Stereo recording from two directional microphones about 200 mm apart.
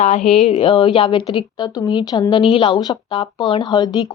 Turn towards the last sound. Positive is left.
turn(degrees=20)  # may be behind; listen again after turning